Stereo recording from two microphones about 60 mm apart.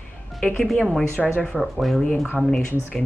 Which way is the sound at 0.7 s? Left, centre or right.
Centre.